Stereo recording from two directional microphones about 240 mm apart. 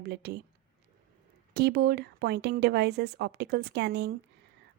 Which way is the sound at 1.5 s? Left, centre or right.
Right.